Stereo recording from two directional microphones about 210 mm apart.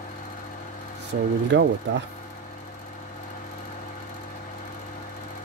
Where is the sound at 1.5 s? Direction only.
60° right (ahead or behind).